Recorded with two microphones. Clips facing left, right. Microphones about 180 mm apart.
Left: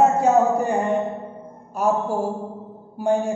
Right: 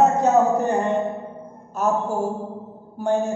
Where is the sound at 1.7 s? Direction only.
10° left (ahead or behind).